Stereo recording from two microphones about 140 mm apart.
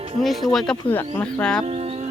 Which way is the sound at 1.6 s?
50° right (ahead or behind).